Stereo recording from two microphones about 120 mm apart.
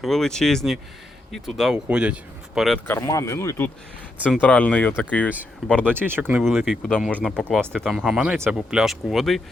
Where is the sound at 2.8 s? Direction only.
20° left (ahead or behind).